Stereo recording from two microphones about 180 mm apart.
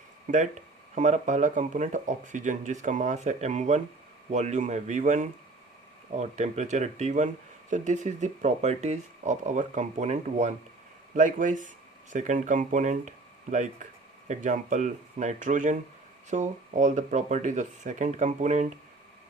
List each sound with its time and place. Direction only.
0.9 s speech: 40° right (ahead or behind)